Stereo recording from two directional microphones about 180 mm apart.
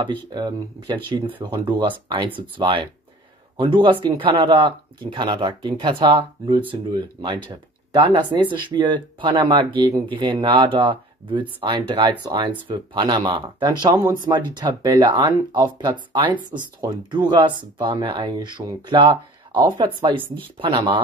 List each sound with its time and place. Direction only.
0.3 s speech: 25° right (ahead or behind)